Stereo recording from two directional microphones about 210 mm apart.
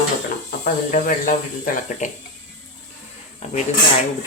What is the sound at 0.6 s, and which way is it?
Speech, 40° left (ahead or behind).